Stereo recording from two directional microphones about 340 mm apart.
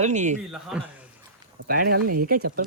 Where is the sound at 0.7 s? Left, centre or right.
Centre.